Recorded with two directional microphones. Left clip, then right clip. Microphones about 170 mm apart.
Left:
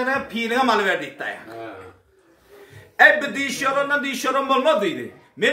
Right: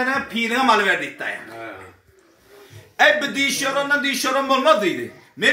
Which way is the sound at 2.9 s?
5° left (ahead or behind).